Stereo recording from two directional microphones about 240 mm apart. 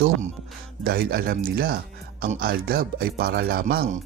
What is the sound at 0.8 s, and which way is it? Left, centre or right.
A man's voice, right.